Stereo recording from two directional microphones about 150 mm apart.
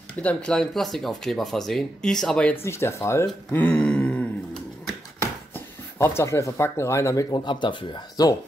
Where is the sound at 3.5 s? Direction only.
10° left (ahead or behind).